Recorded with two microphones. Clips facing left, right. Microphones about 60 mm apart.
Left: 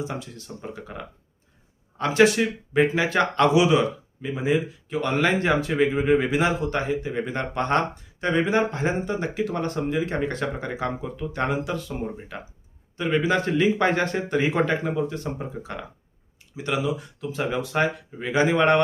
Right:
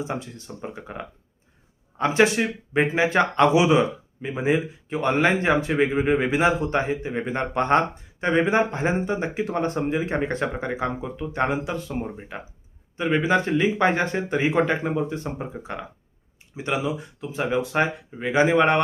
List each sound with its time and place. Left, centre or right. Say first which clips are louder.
0.0 s speech: right 2 dB; right